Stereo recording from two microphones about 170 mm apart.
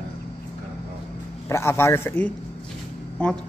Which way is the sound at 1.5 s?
15° left (ahead or behind).